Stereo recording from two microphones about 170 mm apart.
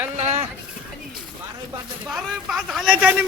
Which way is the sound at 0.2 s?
40° right (ahead or behind).